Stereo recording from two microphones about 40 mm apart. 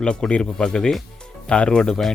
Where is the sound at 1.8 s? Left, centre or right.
Centre.